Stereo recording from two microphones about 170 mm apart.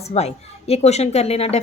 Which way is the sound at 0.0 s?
40° left (ahead or behind).